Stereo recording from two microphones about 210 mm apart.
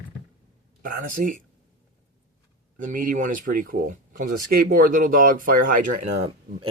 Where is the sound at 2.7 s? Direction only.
40° right (ahead or behind).